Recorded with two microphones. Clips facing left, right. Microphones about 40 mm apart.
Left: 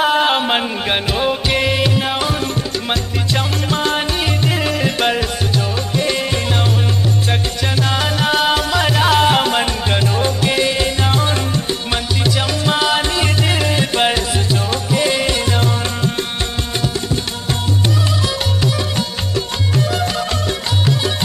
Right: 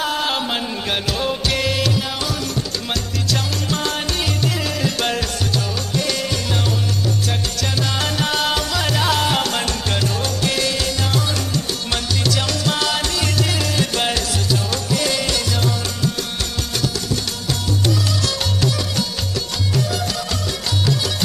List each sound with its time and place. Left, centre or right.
0.0 s music: left
11.9 s music: centre
17.1 s music: left